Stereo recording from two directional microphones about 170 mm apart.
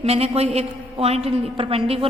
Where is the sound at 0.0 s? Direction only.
35° right (ahead or behind).